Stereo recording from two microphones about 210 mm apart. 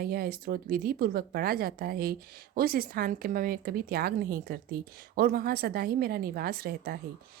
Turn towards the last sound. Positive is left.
turn(degrees=-45)  # may be behind; listen again after turning